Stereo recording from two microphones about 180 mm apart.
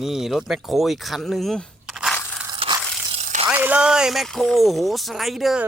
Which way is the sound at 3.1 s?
35° right (ahead or behind).